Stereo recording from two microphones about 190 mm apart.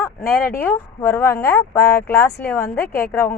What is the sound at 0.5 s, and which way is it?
A woman's voice, 15° left (ahead or behind).